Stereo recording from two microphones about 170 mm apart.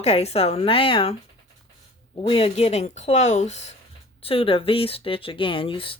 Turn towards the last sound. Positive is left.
turn(degrees=30)  # may be behind; listen again after turning